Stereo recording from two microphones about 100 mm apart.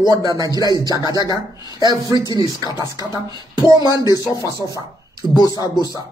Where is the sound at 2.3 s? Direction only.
40° right (ahead or behind).